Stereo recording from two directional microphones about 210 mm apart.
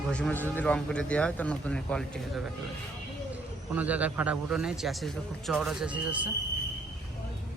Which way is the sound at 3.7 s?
5° right (ahead or behind).